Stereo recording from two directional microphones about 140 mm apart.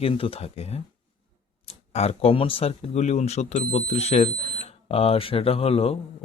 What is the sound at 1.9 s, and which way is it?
Speech, 50° left (ahead or behind).